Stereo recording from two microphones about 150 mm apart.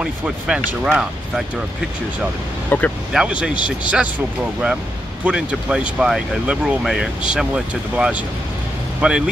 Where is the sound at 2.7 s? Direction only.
15° left (ahead or behind).